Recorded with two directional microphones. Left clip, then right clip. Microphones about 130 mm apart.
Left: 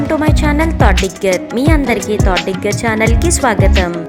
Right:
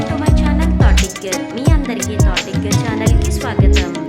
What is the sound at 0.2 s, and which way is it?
Music, 40° left (ahead or behind).